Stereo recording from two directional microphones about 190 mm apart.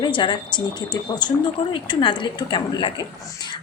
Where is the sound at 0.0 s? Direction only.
25° left (ahead or behind).